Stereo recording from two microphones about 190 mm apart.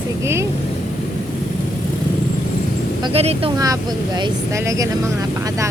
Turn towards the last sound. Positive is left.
turn(degrees=-20)  # may be behind; listen again after turning